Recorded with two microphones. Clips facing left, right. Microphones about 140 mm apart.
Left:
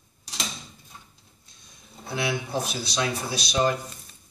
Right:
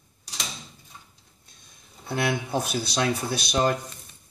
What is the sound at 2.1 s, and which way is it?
Speech, 50° right (ahead or behind).